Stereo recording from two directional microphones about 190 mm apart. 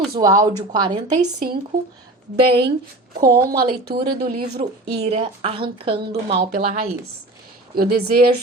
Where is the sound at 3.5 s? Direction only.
50° right (ahead or behind).